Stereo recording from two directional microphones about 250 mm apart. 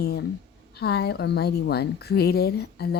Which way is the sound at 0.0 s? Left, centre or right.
Left.